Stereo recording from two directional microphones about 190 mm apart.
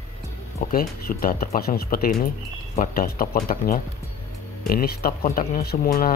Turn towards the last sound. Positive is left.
turn(degrees=50)  # may be behind; listen again after turning